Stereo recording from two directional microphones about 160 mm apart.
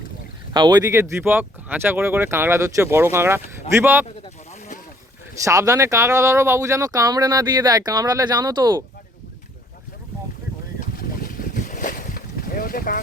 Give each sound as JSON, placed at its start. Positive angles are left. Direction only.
{"t": 0.5, "sound": "speech", "side_deg": -25}
{"t": 5.5, "sound": "speech", "side_deg": -20}
{"t": 10.8, "sound": "boat", "side_deg": 65}